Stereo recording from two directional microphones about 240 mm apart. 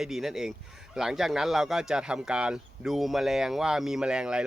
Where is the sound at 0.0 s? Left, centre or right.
Centre.